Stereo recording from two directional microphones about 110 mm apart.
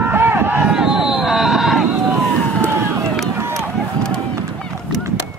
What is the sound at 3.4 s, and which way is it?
Run, 25° right (ahead or behind).